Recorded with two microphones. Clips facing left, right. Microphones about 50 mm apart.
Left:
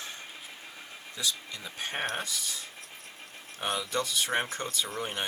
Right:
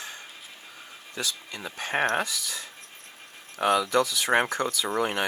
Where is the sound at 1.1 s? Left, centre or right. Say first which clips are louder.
Right 2 dB; right.